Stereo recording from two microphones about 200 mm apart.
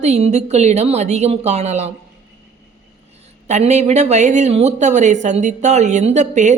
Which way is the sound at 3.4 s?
35° right (ahead or behind).